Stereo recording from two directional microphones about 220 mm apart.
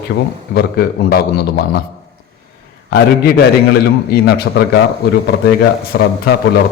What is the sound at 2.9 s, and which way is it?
A man's voice, 45° left (ahead or behind).